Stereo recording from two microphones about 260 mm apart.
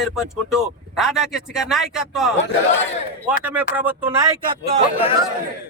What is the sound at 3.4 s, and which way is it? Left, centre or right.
Speech, centre.